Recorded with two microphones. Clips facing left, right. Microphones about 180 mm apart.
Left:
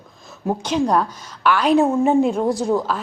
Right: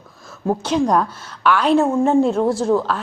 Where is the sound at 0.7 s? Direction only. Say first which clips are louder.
Right 1 dB; 10° left (ahead or behind).